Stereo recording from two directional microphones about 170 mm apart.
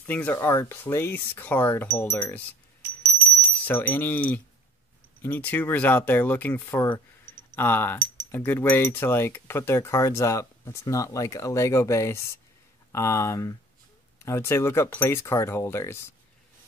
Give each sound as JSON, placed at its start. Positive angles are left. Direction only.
{"t": 0.0, "sound": "speech", "side_deg": 10}
{"t": 3.6, "sound": "speech", "side_deg": 10}